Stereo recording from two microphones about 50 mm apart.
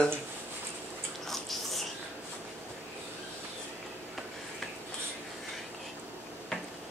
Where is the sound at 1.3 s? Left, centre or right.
Centre.